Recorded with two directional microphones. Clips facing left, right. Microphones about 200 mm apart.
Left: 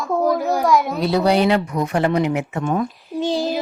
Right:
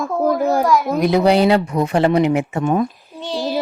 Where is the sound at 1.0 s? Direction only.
20° right (ahead or behind).